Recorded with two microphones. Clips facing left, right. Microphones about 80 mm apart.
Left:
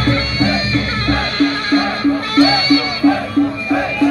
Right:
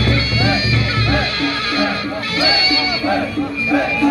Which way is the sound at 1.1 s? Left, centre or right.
Left.